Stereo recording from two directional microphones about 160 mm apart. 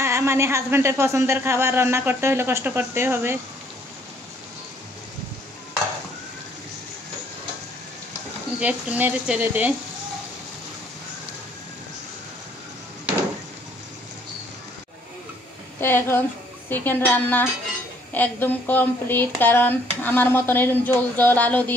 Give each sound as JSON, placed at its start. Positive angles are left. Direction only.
{"t": 0.0, "sound": "speech", "side_deg": -15}
{"t": 8.5, "sound": "speech", "side_deg": -10}
{"t": 15.8, "sound": "speech", "side_deg": 15}